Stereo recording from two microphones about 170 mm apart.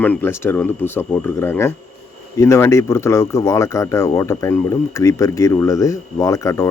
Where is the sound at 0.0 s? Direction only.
10° left (ahead or behind).